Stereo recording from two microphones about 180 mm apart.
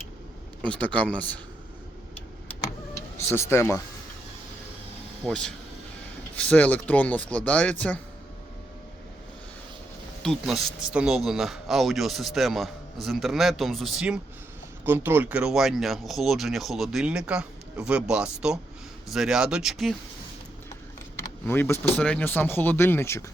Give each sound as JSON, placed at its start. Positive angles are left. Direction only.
{"t": 0.6, "sound": "speech", "side_deg": 5}
{"t": 3.2, "sound": "speech", "side_deg": 15}
{"t": 5.2, "sound": "speech", "side_deg": 5}
{"t": 10.2, "sound": "speech", "side_deg": 0}
{"t": 21.4, "sound": "speech", "side_deg": 10}